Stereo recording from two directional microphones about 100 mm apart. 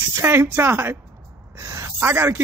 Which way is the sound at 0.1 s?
25° right (ahead or behind).